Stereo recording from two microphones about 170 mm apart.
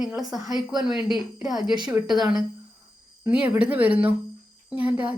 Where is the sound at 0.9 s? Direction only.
25° left (ahead or behind).